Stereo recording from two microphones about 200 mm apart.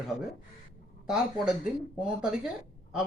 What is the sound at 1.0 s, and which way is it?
A man's voice, 5° right (ahead or behind).